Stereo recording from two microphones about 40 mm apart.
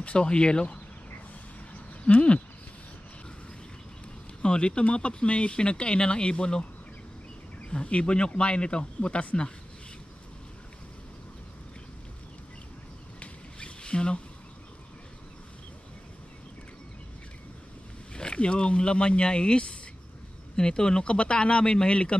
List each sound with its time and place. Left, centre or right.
0.0 s speech: left
2.0 s a sound: left
4.4 s speech: left
7.7 s speech: left
13.2 s a sound: left
18.1 s speech: left